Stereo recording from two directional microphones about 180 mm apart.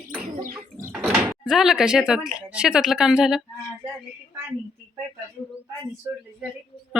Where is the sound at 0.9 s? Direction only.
5° right (ahead or behind).